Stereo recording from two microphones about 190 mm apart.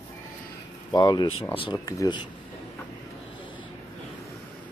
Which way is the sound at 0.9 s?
20° left (ahead or behind).